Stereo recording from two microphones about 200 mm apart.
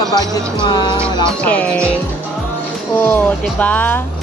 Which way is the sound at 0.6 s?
25° left (ahead or behind).